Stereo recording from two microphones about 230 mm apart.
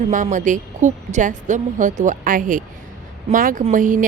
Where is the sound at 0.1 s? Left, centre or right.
Right.